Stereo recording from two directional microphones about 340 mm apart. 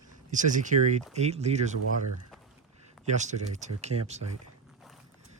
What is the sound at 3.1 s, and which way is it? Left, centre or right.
Speech, right.